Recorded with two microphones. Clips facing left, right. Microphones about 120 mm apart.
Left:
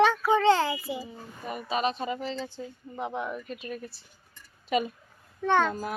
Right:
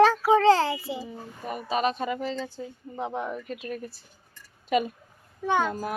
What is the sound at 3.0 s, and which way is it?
Speech, 30° right (ahead or behind).